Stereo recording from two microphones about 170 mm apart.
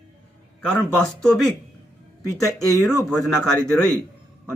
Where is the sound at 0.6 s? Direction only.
5° left (ahead or behind).